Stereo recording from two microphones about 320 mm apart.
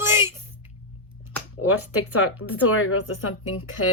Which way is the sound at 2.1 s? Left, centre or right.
Left.